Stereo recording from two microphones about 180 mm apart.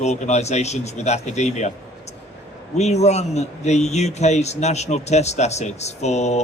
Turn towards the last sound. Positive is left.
turn(degrees=40)  # may be behind; listen again after turning